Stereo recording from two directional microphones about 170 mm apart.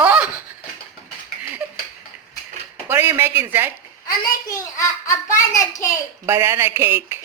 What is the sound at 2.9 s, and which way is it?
Speech, 15° right (ahead or behind).